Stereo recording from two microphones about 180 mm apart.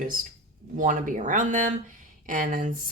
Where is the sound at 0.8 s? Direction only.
45° right (ahead or behind).